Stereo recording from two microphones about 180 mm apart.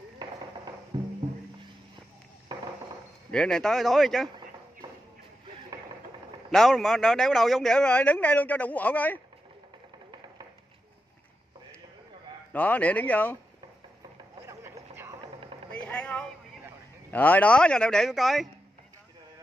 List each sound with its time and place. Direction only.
0.9 s music: 25° right (ahead or behind)
3.3 s a man's voice: 5° left (ahead or behind)
6.5 s a man's voice: centre (ahead or behind)
12.5 s speech: 10° left (ahead or behind)
14.4 s a sound: 15° right (ahead or behind)
15.7 s vehicle: 5° left (ahead or behind)
17.1 s a man's voice: 10° left (ahead or behind)